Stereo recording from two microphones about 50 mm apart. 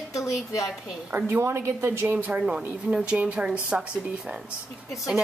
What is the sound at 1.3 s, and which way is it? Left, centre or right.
Speech, right.